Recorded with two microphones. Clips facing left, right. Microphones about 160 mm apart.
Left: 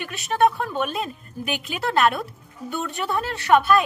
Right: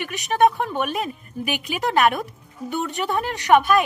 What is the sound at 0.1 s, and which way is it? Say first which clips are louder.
Speech: right 1 dB; 15° right (ahead or behind).